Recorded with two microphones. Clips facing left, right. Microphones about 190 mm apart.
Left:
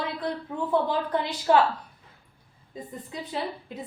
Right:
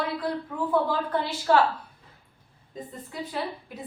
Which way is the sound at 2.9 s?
20° left (ahead or behind).